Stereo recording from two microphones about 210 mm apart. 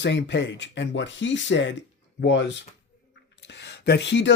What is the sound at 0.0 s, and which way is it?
Speech, 55° left (ahead or behind).